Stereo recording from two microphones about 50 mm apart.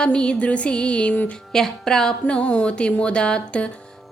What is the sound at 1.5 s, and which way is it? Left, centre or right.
Speech, centre.